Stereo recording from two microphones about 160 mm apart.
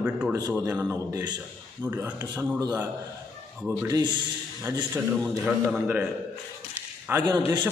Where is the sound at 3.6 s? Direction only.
15° right (ahead or behind).